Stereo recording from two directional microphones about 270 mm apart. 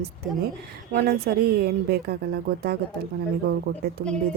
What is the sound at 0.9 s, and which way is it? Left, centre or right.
Speech, right.